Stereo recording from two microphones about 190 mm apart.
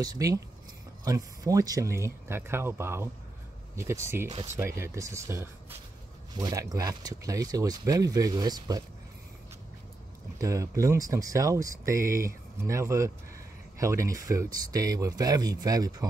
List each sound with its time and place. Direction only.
0.0 s speech: 20° right (ahead or behind)
10.4 s speech: 15° right (ahead or behind)